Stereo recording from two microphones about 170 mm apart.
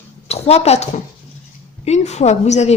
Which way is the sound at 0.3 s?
40° left (ahead or behind).